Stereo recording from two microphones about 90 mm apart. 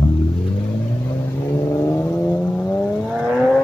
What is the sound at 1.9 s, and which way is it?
Vehicle, 25° left (ahead or behind).